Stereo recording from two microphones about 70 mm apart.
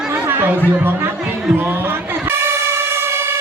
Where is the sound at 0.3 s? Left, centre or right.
Right.